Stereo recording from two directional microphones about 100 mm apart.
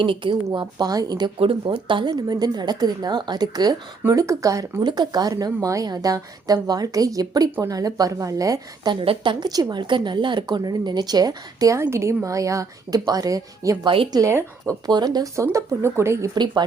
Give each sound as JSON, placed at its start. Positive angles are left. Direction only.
{"t": 0.0, "sound": "a woman's voice", "side_deg": -55}
{"t": 1.6, "sound": "a woman's voice", "side_deg": -55}
{"t": 4.8, "sound": "speech", "side_deg": -45}
{"t": 8.9, "sound": "speech", "side_deg": -55}
{"t": 13.8, "sound": "speech", "side_deg": -65}
{"t": 14.1, "sound": "speech", "side_deg": -35}
{"t": 16.3, "sound": "a woman's voice", "side_deg": -45}